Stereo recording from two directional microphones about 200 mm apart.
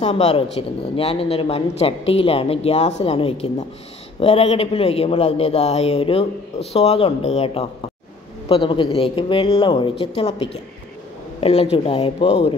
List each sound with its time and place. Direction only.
0.0 s speech: 30° left (ahead or behind)